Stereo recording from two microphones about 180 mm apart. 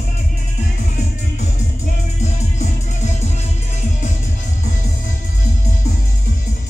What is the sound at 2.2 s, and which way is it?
Music, 40° left (ahead or behind).